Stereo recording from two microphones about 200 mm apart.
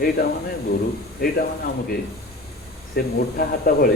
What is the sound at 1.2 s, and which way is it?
Speech, 50° left (ahead or behind).